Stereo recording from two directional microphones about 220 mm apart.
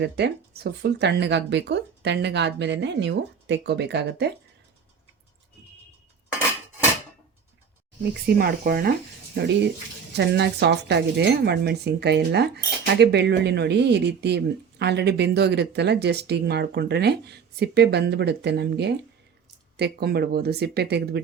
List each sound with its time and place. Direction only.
0.0 s speech: 50° right (ahead or behind)
8.3 s speech: 45° right (ahead or behind)